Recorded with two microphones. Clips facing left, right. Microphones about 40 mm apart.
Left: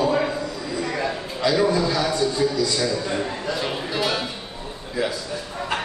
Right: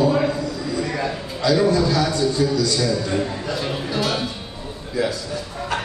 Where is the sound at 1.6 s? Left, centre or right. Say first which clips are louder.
Right 2 dB; centre.